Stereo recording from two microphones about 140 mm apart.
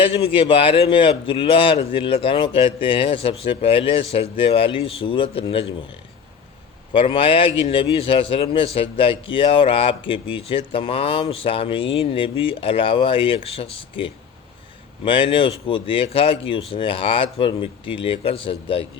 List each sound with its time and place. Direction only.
0.0 s a man's voice: 40° left (ahead or behind)
6.9 s a man's voice: 40° left (ahead or behind)